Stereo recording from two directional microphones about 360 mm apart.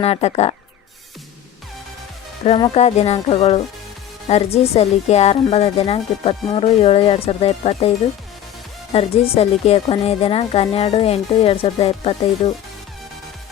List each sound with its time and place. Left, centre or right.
0.0 s speech: centre
2.4 s speech: centre
8.9 s speech: centre